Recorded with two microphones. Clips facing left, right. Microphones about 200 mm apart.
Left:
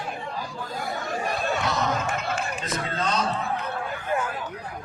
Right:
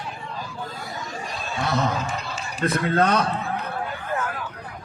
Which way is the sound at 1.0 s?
60° left (ahead or behind).